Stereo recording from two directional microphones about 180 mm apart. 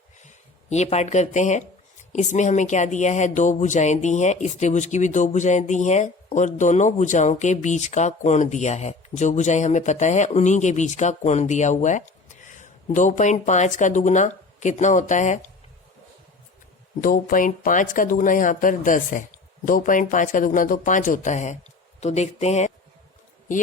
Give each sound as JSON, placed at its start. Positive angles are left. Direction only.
{"t": 0.2, "sound": "speech", "side_deg": 40}
{"t": 17.0, "sound": "speech", "side_deg": 50}